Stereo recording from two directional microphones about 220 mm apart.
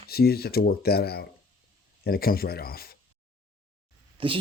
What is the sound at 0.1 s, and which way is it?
Speech, 45° left (ahead or behind).